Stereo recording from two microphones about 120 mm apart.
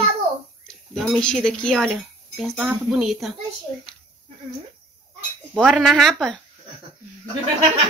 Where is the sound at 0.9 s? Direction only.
5° left (ahead or behind).